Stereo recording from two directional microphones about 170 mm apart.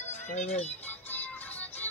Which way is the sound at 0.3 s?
45° left (ahead or behind).